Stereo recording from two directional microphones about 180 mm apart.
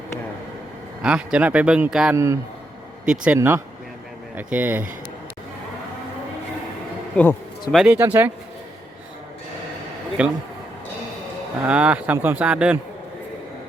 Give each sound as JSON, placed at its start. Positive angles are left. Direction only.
{"t": 1.0, "sound": "a man's voice", "side_deg": -5}
{"t": 2.1, "sound": "speech", "side_deg": -15}
{"t": 7.7, "sound": "speech", "side_deg": -5}
{"t": 10.2, "sound": "speech", "side_deg": -5}
{"t": 11.6, "sound": "speech", "side_deg": -5}